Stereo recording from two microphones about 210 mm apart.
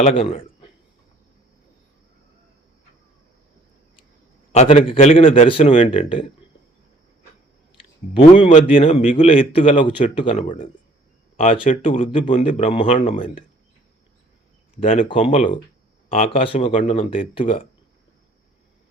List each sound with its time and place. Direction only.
0.0 s a man's voice: 30° left (ahead or behind)
4.5 s a man's voice: 30° left (ahead or behind)
8.1 s a man's voice: 25° left (ahead or behind)
14.8 s a man's voice: 40° left (ahead or behind)